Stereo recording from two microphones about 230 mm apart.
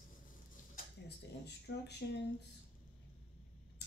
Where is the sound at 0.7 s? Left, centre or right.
Left.